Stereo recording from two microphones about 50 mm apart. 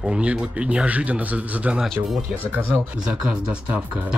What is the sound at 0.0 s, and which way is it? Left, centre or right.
A man's voice, right.